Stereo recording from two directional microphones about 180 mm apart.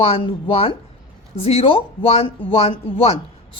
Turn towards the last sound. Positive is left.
turn(degrees=30)  # may be behind; listen again after turning